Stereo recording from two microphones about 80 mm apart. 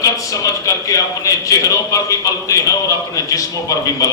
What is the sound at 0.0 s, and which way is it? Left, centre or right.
A man's voice, left.